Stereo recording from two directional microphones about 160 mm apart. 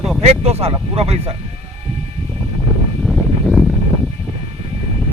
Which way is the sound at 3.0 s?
Centre (ahead or behind).